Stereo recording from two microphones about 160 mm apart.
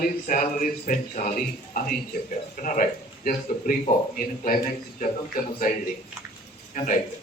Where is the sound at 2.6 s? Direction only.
55° left (ahead or behind).